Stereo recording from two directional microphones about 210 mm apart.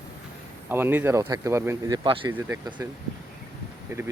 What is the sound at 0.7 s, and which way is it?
Speech, 10° right (ahead or behind).